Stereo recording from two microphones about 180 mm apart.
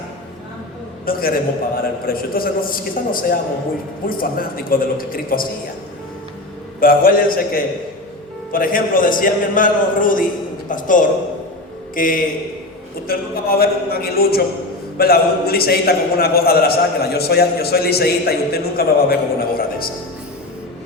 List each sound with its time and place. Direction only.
1.0 s a man's voice: 55° left (ahead or behind)
6.7 s a man's voice: 55° left (ahead or behind)